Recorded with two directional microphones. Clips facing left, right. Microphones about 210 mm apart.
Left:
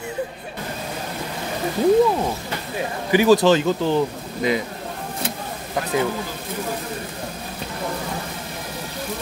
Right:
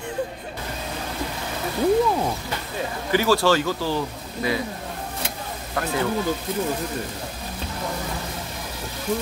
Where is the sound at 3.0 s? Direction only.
15° left (ahead or behind).